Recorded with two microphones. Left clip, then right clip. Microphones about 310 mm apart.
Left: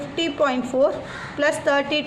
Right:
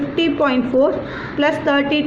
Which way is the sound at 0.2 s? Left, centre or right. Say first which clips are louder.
Right 4 dB; centre.